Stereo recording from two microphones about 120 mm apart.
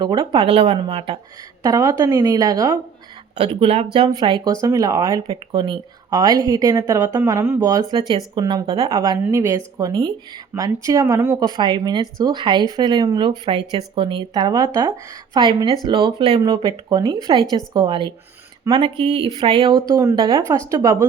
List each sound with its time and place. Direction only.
0.0 s speech: 35° right (ahead or behind); by 0.8 s 55° right (ahead or behind)
0.8 s speech: 45° right (ahead or behind)
1.6 s a woman's voice: 30° right (ahead or behind)
3.3 s speech: 50° right (ahead or behind)
4.1 s speech: 40° right (ahead or behind)
4.6 s a woman's voice: 25° right (ahead or behind)
5.3 s a woman's voice: 45° right (ahead or behind); by 11.3 s 25° right (ahead or behind)
11.3 s speech: 35° right (ahead or behind)
19.9 s a woman's voice: 25° right (ahead or behind)
20.1 s a woman's voice: 35° right (ahead or behind)